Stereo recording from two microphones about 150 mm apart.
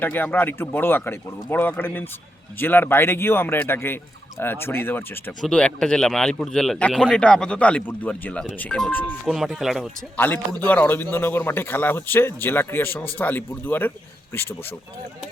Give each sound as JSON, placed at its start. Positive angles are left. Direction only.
{"t": 0.0, "sound": "speech", "side_deg": 10}
{"t": 9.2, "sound": "speech", "side_deg": 0}
{"t": 10.2, "sound": "speech", "side_deg": 10}